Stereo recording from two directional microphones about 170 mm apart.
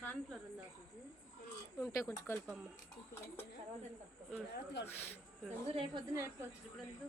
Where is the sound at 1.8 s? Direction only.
20° left (ahead or behind).